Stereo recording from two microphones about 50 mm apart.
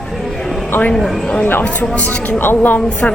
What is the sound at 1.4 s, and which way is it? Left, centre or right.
Speech, left.